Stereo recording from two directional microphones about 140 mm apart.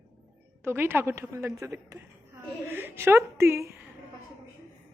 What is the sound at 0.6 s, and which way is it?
A woman's voice, 15° right (ahead or behind).